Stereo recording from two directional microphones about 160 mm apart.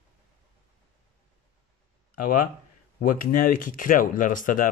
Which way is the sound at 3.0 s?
60° left (ahead or behind).